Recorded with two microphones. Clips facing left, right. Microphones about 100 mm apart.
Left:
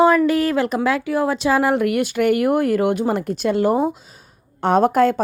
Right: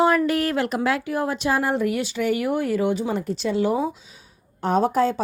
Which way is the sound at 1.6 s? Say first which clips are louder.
Left 5 dB; 75° left (ahead or behind).